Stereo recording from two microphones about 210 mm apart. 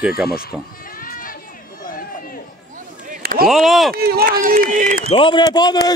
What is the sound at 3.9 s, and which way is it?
A man's voice, 45° right (ahead or behind).